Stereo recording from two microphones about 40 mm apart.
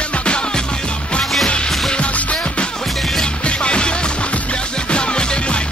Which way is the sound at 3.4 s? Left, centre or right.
Left.